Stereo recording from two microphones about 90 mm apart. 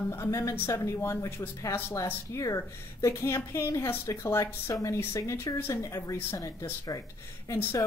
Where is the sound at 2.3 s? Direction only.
35° left (ahead or behind).